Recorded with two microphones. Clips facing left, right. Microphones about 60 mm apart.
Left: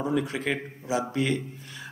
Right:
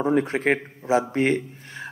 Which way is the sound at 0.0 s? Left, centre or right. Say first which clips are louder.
Right 6 dB; right.